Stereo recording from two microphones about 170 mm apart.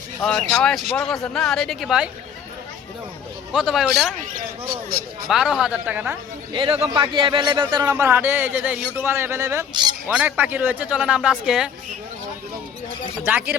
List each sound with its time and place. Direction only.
0.2 s speech: 5° left (ahead or behind)
3.5 s speech: 5° right (ahead or behind)
5.3 s speech: centre (ahead or behind)
6.5 s speech: 30° right (ahead or behind)
7.9 s a man's voice: 15° right (ahead or behind)
13.2 s a man's voice: 10° right (ahead or behind)